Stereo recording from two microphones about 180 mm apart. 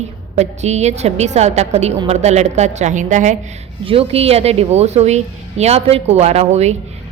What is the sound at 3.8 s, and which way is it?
A woman's voice, 30° right (ahead or behind).